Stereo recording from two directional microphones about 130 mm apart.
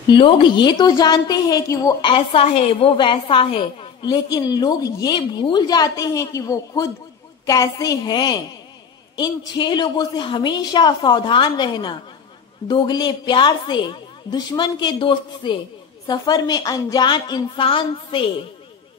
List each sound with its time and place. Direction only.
0.0 s a woman's voice: 40° left (ahead or behind)
2.0 s a woman's voice: 45° left (ahead or behind)